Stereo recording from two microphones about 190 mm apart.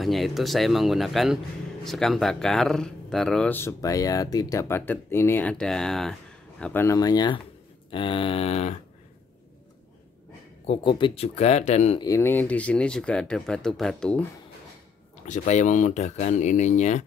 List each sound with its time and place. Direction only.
0.0 s speech: centre (ahead or behind); by 7.3 s 20° left (ahead or behind)
7.9 s a sound: 25° left (ahead or behind)
10.7 s speech: 25° left (ahead or behind)
12.0 s speech: 15° left (ahead or behind)
15.2 s speech: 40° left (ahead or behind)